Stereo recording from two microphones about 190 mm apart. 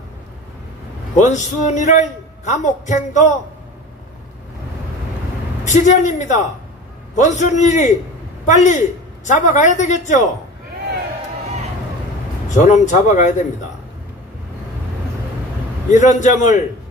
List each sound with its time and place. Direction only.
1.1 s a man's voice: 40° left (ahead or behind)
5.7 s a man's voice: 40° left (ahead or behind)
12.4 s a man's voice: 40° left (ahead or behind)
15.9 s a man's voice: 40° left (ahead or behind)